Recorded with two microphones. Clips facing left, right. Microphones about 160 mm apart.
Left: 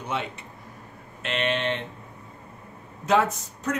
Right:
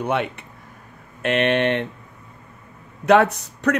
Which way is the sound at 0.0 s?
60° right (ahead or behind).